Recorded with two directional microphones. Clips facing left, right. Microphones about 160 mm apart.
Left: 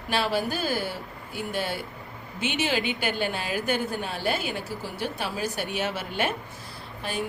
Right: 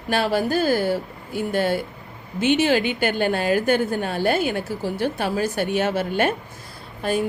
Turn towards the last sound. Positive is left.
turn(degrees=-45)  # may be behind; listen again after turning